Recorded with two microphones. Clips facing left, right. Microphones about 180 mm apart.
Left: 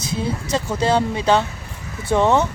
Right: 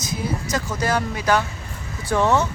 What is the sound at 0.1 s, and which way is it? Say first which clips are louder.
A man's voice: left 3 dB; 30° left (ahead or behind).